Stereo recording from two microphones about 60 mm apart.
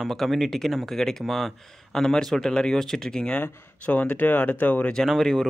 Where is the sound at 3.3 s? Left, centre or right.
Left.